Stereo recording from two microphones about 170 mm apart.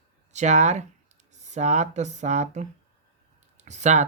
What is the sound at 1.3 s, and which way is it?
Speech, 45° right (ahead or behind).